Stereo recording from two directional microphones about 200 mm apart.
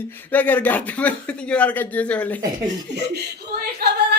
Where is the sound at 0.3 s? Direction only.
10° left (ahead or behind).